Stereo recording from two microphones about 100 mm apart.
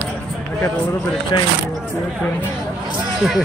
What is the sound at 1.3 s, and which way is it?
Speech, 50° left (ahead or behind).